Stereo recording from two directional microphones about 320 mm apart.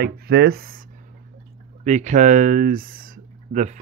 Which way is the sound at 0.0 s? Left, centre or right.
Right.